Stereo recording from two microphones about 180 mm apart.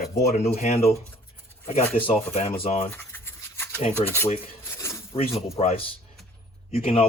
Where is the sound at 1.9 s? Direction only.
30° left (ahead or behind).